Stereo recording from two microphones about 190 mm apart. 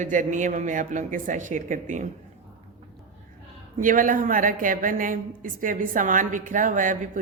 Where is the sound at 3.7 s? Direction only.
45° right (ahead or behind).